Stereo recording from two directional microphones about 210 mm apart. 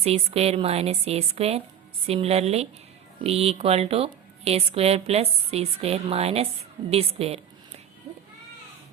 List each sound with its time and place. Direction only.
0.0 s a woman's voice: 30° right (ahead or behind)